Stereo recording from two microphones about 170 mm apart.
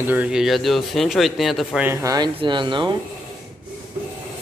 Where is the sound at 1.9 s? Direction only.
20° right (ahead or behind).